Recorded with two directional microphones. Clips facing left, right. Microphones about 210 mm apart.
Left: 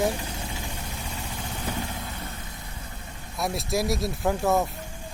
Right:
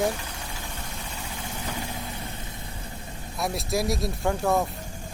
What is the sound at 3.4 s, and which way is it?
Speech, centre (ahead or behind).